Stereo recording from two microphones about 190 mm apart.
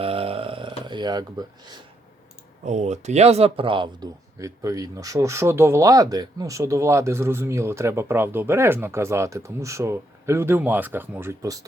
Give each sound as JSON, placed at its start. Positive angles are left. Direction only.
{"t": 0.0, "sound": "a sound", "side_deg": -30}
{"t": 0.9, "sound": "speech", "side_deg": -25}
{"t": 2.6, "sound": "speech", "side_deg": -35}